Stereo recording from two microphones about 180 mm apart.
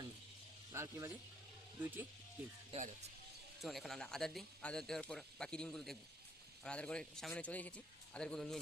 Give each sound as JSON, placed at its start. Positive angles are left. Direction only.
{"t": 0.7, "sound": "speech", "side_deg": -15}
{"t": 2.7, "sound": "speech", "side_deg": -40}
{"t": 3.6, "sound": "speech", "side_deg": 0}